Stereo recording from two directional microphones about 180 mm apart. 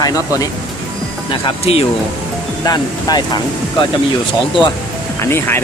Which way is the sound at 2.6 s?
20° left (ahead or behind).